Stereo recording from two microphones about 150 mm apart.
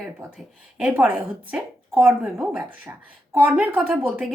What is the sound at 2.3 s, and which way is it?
A woman's voice, 15° right (ahead or behind).